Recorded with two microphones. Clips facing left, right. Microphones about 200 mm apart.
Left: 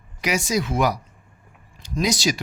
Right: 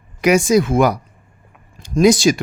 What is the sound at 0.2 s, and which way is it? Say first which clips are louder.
Speech: right 10 dB; 50° right (ahead or behind).